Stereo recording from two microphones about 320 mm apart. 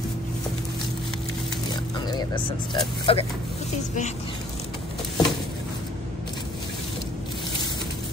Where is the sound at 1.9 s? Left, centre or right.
Centre.